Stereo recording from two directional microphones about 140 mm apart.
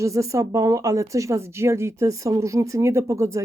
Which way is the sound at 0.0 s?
20° right (ahead or behind).